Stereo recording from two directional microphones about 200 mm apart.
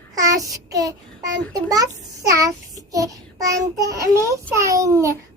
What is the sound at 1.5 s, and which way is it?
Speech, 20° right (ahead or behind).